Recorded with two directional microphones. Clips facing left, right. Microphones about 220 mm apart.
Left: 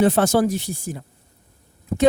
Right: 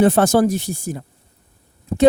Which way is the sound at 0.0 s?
50° right (ahead or behind).